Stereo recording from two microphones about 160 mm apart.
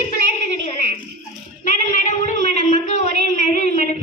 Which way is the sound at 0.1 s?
55° left (ahead or behind).